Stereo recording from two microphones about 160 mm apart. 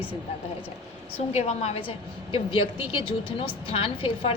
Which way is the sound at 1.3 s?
40° left (ahead or behind).